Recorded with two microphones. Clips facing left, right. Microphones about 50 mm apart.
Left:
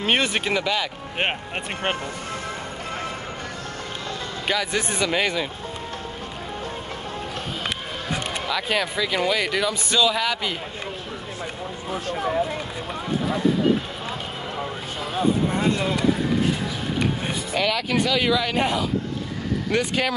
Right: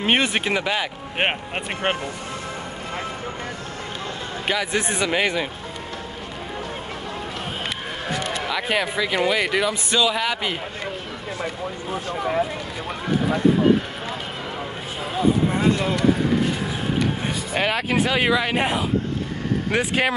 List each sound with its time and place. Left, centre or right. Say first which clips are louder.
0.0 s speech: right 2 dB; centre
4.5 s speech: right 1 dB; centre
8.5 s speech: even; centre
17.6 s speech: right 1 dB; right